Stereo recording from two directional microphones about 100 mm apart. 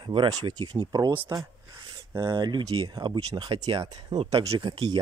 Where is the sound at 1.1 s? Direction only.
25° right (ahead or behind).